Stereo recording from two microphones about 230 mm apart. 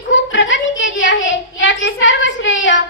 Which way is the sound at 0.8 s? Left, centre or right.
Left.